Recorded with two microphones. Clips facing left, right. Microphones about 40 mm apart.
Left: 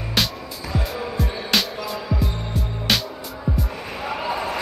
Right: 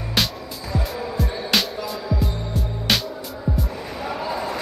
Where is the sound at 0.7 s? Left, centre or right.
Left.